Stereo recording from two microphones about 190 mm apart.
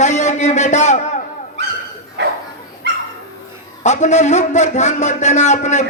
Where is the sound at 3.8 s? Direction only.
40° left (ahead or behind).